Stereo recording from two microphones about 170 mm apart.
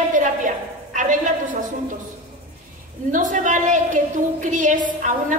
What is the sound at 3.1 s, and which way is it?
A woman's voice, 50° right (ahead or behind).